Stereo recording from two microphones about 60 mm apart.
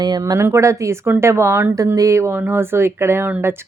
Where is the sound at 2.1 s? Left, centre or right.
Right.